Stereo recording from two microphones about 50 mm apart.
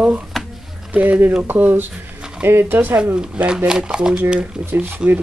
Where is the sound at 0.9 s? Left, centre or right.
Right.